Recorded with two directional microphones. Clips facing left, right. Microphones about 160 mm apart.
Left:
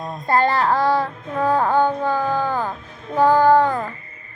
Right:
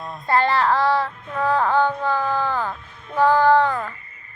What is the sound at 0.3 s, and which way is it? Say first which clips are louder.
Child singing: left 1 dB; 45° left (ahead or behind).